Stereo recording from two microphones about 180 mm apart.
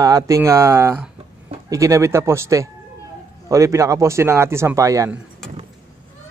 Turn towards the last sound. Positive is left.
turn(degrees=-20)  # may be behind; listen again after turning